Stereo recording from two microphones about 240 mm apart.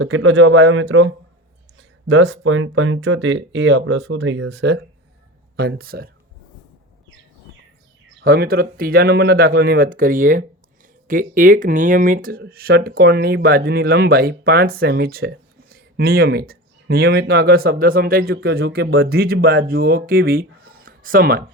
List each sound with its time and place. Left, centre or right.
0.0 s speech: right
8.2 s speech: right